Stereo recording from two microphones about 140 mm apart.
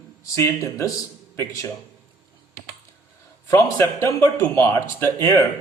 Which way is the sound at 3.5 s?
20° left (ahead or behind).